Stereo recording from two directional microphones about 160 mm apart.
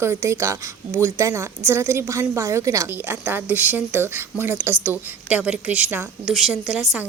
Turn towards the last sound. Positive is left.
turn(degrees=0)  # may be behind; listen again after turning